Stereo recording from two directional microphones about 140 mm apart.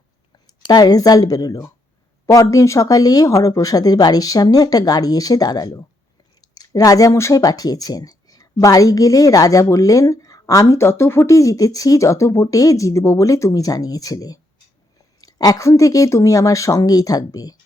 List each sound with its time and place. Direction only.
0.4 s speech: 30° left (ahead or behind)